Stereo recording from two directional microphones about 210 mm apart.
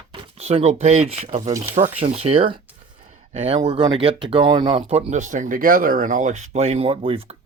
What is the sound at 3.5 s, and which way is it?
Speech, 20° right (ahead or behind).